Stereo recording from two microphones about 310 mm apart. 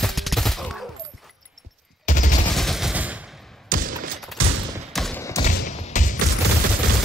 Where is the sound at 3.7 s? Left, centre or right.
Right.